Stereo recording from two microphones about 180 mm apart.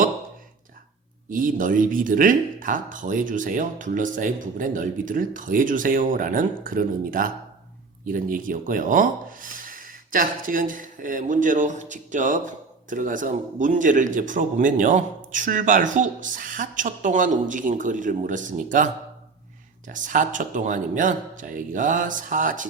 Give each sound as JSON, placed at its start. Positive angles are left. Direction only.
{"t": 1.3, "sound": "speech", "side_deg": -50}
{"t": 19.9, "sound": "speech", "side_deg": -45}